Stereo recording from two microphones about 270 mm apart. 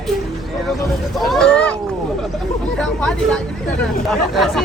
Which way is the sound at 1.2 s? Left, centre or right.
Centre.